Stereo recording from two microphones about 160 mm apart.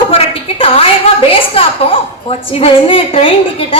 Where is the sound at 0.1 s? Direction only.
35° left (ahead or behind).